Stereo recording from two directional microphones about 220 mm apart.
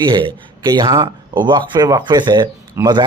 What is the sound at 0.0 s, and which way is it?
Speech, 20° right (ahead or behind).